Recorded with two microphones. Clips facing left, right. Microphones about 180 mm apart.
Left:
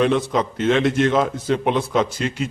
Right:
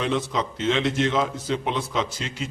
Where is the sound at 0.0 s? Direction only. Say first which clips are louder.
Left 6 dB; 55° left (ahead or behind).